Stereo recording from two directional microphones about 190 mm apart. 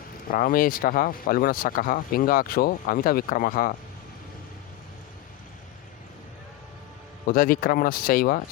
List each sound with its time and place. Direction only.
0.3 s speech: 50° left (ahead or behind)
7.3 s speech: 50° left (ahead or behind)